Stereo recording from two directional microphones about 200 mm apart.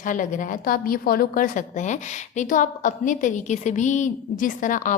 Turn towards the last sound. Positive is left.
turn(degrees=40)  # may be behind; listen again after turning